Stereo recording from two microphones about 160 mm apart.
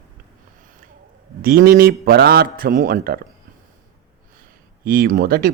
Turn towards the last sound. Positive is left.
turn(degrees=-70)  # may be behind; listen again after turning